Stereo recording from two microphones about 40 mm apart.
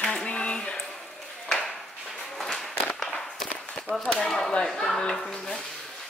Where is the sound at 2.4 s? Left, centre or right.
Centre.